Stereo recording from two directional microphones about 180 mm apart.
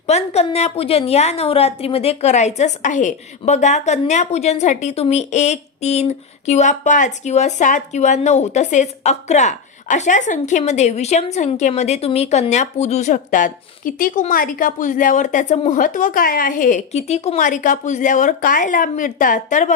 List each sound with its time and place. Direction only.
0.1 s a woman's voice: 35° left (ahead or behind)